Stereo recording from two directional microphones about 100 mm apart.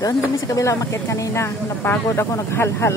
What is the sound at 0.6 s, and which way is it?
Speech, 35° left (ahead or behind).